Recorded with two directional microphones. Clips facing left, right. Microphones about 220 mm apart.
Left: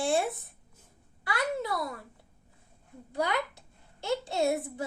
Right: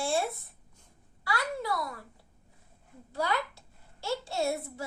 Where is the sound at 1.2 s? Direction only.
20° left (ahead or behind).